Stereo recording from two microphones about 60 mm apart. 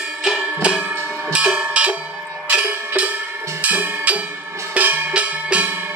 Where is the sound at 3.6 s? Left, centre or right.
Right.